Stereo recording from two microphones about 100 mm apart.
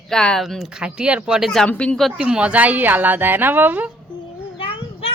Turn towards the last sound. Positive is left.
turn(degrees=65)  # may be behind; listen again after turning